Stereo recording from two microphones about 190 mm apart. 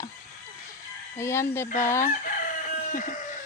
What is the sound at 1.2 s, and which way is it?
Speech, 15° left (ahead or behind).